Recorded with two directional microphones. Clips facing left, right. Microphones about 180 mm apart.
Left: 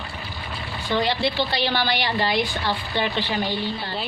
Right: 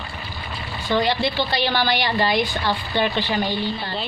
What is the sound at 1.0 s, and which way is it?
A woman's voice, 45° right (ahead or behind).